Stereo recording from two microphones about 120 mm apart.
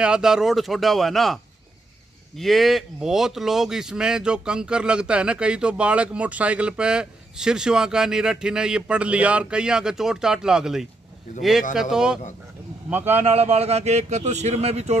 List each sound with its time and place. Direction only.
0.0 s speech: 5° right (ahead or behind)
12.9 s a man's voice: 15° right (ahead or behind)
13.2 s a man's voice: 60° right (ahead or behind)